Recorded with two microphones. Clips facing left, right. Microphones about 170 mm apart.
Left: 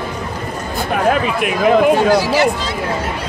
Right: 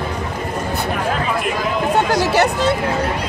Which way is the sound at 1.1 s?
70° left (ahead or behind).